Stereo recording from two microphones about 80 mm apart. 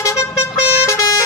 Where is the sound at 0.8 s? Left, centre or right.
Left.